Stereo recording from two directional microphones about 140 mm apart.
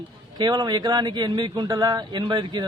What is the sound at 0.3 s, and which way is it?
A man's voice, 30° right (ahead or behind).